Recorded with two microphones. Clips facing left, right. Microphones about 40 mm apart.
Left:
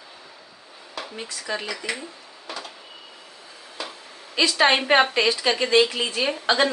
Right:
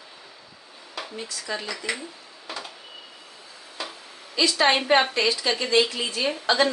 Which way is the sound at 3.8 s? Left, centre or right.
Centre.